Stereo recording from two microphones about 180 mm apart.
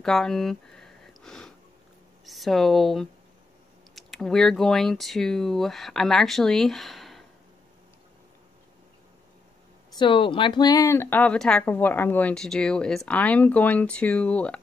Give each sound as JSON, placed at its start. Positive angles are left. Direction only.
{"t": 0.0, "sound": "a sound", "side_deg": 5}
{"t": 2.2, "sound": "speech", "side_deg": 0}
{"t": 9.9, "sound": "speech", "side_deg": 30}